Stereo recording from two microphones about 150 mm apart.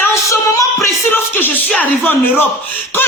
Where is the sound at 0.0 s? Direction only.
20° left (ahead or behind).